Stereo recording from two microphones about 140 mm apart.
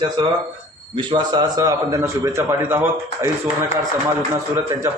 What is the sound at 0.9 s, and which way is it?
Speech, 35° right (ahead or behind).